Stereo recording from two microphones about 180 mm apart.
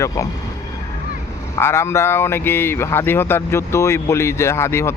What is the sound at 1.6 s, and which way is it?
Speech, 15° left (ahead or behind).